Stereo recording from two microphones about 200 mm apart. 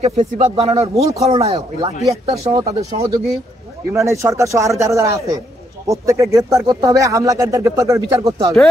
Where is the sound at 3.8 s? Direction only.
15° right (ahead or behind).